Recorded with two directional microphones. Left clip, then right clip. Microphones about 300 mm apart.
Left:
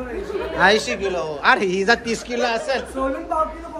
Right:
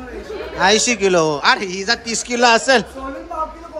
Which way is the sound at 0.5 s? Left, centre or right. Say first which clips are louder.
Right 2 dB; centre.